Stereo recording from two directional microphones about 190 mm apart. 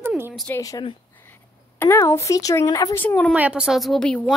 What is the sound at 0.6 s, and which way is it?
Speech, 20° left (ahead or behind).